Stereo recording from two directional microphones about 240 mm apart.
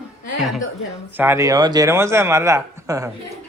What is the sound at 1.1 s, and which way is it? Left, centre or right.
A man's voice, centre.